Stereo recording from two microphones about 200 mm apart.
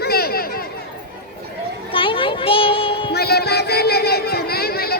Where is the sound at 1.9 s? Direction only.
25° left (ahead or behind).